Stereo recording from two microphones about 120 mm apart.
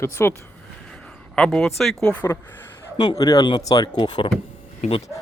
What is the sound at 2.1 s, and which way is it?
Speech, 15° left (ahead or behind).